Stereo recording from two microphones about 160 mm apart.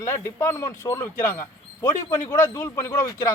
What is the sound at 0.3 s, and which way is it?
Speech, 20° left (ahead or behind).